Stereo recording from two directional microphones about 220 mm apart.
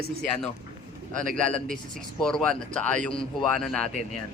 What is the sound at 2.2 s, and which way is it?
Speech, 5° left (ahead or behind).